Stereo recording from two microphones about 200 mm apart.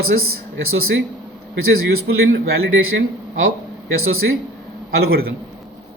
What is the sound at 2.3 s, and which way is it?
Speech, 55° right (ahead or behind).